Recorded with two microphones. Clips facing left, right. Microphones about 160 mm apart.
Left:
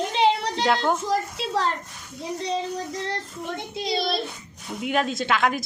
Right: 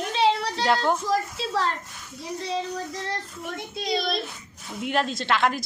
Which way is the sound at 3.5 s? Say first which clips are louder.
Even; 30° left (ahead or behind).